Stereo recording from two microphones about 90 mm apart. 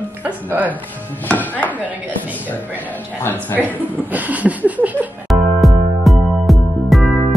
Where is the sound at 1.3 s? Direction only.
20° left (ahead or behind).